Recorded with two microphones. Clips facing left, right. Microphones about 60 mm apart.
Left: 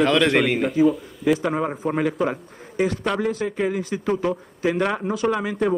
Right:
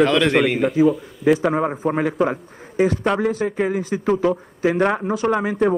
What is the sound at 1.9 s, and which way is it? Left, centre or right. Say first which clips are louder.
A man's voice: even; right.